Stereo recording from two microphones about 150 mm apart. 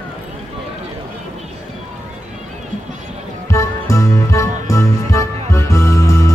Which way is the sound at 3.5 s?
20° left (ahead or behind).